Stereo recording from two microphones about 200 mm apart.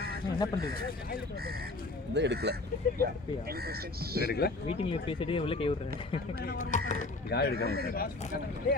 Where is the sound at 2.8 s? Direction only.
45° left (ahead or behind).